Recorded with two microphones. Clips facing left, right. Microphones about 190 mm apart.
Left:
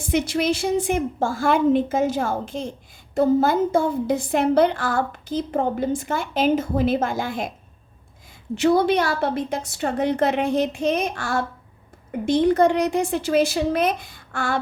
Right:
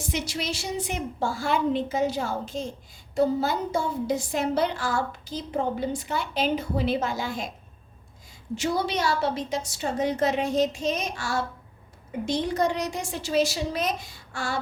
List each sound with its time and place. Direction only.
0.1 s a woman's voice: 55° left (ahead or behind)
8.5 s a woman's voice: 60° left (ahead or behind)